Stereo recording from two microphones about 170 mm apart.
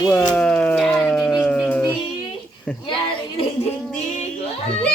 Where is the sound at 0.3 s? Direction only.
5° left (ahead or behind).